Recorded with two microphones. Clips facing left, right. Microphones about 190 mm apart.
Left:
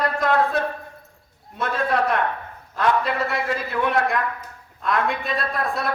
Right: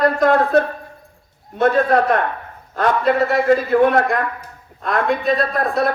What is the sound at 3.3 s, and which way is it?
A man's voice, 50° right (ahead or behind).